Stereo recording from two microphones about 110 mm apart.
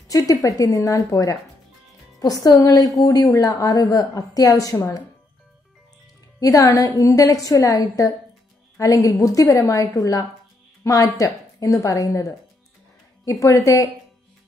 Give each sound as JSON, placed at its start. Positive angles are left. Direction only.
{"t": 0.1, "sound": "a woman's voice", "side_deg": 30}
{"t": 6.4, "sound": "a woman's voice", "side_deg": 30}